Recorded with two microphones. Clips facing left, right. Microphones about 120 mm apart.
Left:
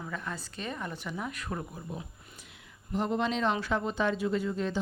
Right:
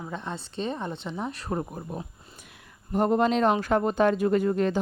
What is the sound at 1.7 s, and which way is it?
Speech, 45° right (ahead or behind).